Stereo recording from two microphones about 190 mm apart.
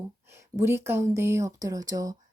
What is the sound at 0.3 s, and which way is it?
Speech, 15° right (ahead or behind).